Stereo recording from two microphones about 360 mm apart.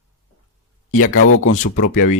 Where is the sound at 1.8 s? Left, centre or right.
Left.